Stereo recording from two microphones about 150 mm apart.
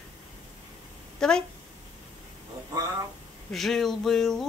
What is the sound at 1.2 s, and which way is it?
Speech, 5° left (ahead or behind).